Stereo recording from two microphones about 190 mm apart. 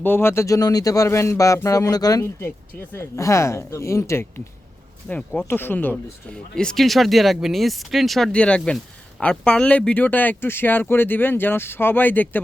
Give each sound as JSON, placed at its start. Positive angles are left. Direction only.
{"t": 0.0, "sound": "speech", "side_deg": 10}